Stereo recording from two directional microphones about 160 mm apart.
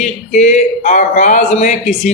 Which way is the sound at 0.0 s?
50° left (ahead or behind).